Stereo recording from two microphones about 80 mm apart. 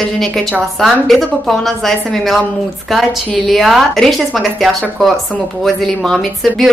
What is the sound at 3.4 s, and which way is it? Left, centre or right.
Speech, centre.